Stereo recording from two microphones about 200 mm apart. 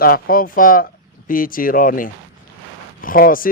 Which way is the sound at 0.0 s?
45° left (ahead or behind).